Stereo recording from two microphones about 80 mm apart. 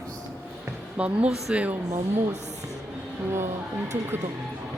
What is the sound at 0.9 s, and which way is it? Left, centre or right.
Speech, centre.